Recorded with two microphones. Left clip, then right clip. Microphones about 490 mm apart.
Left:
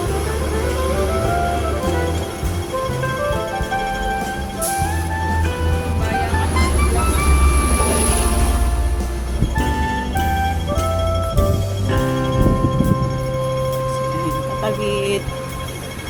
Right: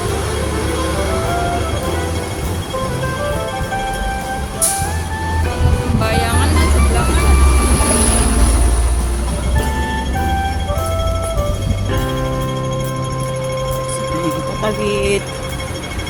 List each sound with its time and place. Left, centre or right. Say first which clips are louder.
11.9 s music: even; centre
14.6 s music: right 3 dB; left